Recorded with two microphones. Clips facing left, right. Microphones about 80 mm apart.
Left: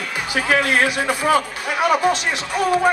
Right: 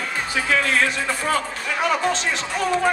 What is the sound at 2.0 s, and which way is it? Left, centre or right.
Speech, centre.